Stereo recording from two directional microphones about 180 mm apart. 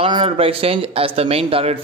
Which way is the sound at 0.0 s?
30° right (ahead or behind).